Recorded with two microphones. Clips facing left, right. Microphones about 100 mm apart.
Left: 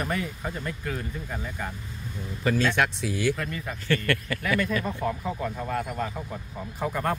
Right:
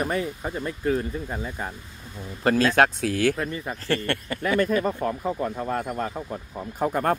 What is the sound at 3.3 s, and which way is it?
Speech, 25° right (ahead or behind).